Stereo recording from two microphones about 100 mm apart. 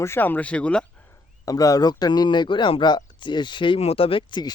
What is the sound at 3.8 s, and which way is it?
Speech, 80° left.